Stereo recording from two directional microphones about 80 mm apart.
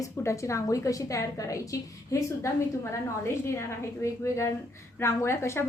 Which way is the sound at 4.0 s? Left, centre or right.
Left.